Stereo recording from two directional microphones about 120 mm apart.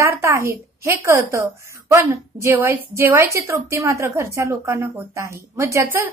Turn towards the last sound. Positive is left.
turn(degrees=-20)  # may be behind; listen again after turning